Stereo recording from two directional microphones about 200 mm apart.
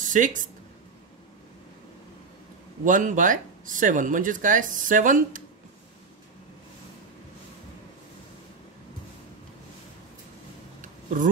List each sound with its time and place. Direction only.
0.0 s speech: 40° right (ahead or behind)
2.8 s speech: 40° right (ahead or behind)
10.8 s a sound: 40° right (ahead or behind)